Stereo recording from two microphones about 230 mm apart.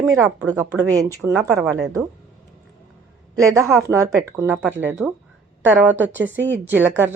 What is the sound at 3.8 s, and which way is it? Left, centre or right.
A woman's voice, centre.